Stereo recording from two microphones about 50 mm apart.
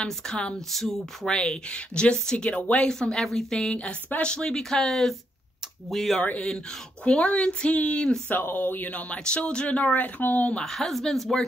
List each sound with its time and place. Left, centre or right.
0.7 s speech: centre
4.6 s speech: centre
7.2 s speech: left
8.3 s speech: left
9.1 s speech: centre; by 10.5 s left
10.6 s speech: centre